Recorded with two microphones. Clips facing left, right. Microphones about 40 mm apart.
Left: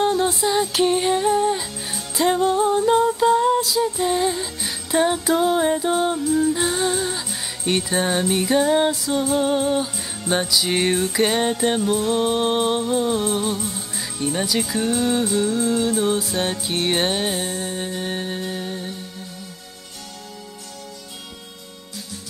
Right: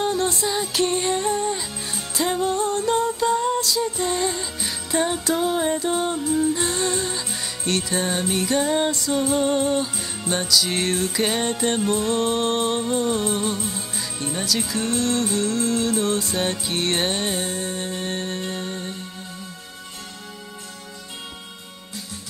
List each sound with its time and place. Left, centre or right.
0.0 s music: centre
4.9 s music: centre
7.7 s music: left
14.2 s music: centre